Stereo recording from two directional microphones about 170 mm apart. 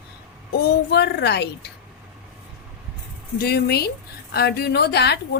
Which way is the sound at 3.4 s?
65° left (ahead or behind).